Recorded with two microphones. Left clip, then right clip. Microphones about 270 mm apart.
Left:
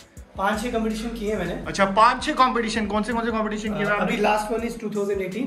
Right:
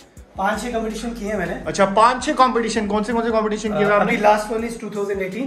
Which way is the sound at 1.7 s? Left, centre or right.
Centre.